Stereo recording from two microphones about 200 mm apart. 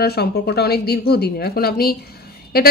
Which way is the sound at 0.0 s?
50° left (ahead or behind).